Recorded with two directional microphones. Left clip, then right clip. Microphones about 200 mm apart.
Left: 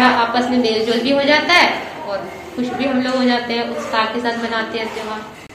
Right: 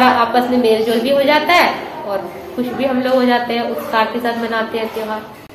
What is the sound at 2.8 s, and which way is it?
A woman's voice, 15° right (ahead or behind).